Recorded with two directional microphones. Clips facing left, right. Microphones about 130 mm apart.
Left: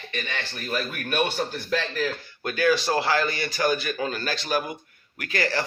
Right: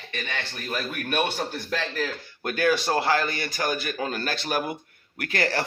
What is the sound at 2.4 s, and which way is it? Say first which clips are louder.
A man's voice: left 1 dB; 50° right (ahead or behind).